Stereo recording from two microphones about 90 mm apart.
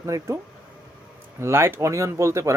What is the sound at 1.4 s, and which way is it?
Speech, 30° right (ahead or behind).